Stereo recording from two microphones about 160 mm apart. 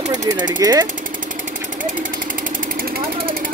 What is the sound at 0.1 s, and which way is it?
Speech, 25° right (ahead or behind).